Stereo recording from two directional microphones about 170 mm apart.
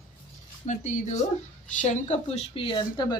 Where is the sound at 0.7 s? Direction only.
45° left (ahead or behind).